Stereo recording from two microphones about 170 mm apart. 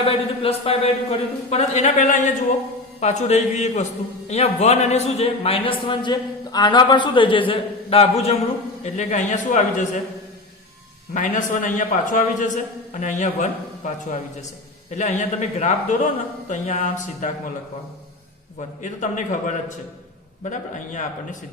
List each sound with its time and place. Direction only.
0.0 s a man's voice: 35° left (ahead or behind)
11.1 s a man's voice: 50° left (ahead or behind)
18.8 s a man's voice: 45° left (ahead or behind)